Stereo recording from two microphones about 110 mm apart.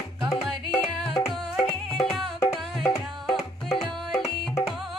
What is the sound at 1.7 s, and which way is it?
Music, 55° left (ahead or behind).